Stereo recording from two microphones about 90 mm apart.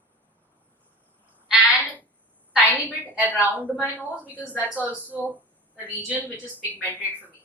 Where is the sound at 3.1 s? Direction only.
20° right (ahead or behind).